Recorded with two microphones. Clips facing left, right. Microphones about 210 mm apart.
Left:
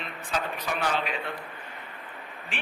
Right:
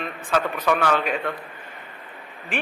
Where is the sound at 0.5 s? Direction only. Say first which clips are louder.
Right 8 dB; 65° right (ahead or behind).